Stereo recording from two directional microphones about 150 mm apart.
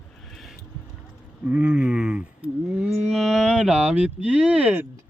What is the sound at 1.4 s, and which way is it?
Cattle, 10° right (ahead or behind).